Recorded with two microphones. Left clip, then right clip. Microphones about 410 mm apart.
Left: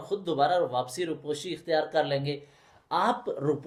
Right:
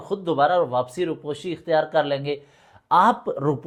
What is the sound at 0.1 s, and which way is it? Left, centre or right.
Speech, right.